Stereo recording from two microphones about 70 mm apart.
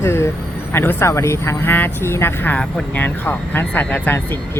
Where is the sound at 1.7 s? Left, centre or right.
Left.